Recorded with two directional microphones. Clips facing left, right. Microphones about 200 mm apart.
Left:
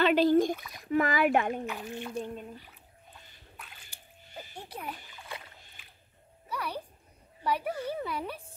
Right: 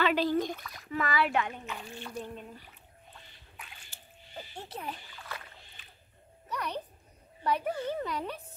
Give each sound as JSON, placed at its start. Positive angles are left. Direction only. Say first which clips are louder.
{"t": 0.1, "sound": "speech", "louder": "left 5 dB", "side_deg": 5}
{"t": 0.9, "sound": "speech", "louder": "left 4 dB", "side_deg": 45}
{"t": 1.8, "sound": "speech", "louder": "left 5 dB", "side_deg": 15}
{"t": 4.4, "sound": "rowboat", "louder": "right 1 dB", "side_deg": 10}
{"t": 6.5, "sound": "a child's voice", "louder": "even", "side_deg": 10}